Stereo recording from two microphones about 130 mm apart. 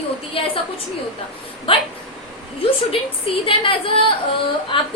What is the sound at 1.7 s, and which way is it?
Speech, 45° left (ahead or behind).